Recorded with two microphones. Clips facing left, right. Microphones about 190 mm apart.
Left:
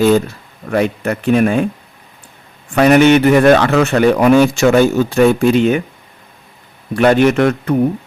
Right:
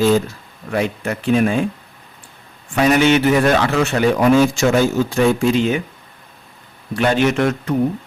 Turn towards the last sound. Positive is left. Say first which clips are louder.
# left 5 dB
turn(degrees=60)  # may be behind; listen again after turning